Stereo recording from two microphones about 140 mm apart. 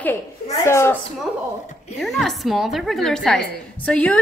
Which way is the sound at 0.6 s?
20° left (ahead or behind).